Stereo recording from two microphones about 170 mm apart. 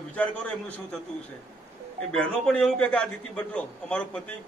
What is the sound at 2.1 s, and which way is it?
A man's voice, 5° left (ahead or behind).